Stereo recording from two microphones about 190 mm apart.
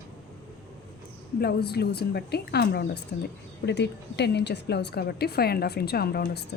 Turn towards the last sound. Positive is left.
turn(degrees=55)  # may be behind; listen again after turning